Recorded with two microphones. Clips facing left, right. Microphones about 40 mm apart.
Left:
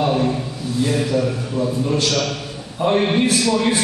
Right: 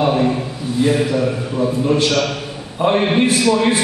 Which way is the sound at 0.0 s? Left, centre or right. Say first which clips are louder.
Right 3 dB; centre.